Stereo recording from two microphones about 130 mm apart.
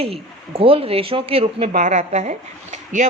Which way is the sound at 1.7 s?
70° right (ahead or behind).